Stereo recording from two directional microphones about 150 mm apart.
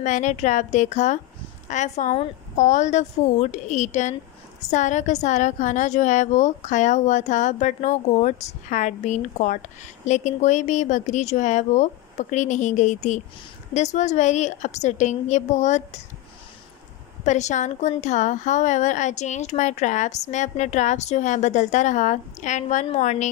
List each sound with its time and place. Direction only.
0.0 s a woman's voice: 55° left (ahead or behind)
17.2 s a woman's voice: 50° left (ahead or behind)